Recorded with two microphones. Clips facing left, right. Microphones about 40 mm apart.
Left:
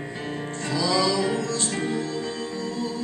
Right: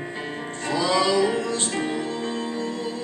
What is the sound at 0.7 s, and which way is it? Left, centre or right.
Music, right.